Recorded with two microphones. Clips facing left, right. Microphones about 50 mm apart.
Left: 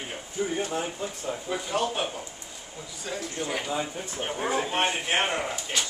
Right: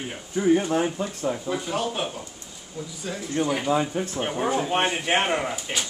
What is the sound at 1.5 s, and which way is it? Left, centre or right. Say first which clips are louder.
Speech: right 1 dB; centre.